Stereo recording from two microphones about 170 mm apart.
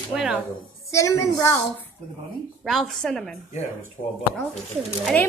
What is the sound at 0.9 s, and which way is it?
Speech, 20° left (ahead or behind).